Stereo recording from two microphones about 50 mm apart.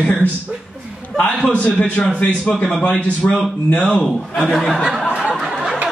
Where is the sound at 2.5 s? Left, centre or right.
Centre.